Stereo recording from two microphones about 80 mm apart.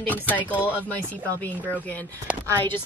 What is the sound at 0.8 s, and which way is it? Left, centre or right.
Speech, centre.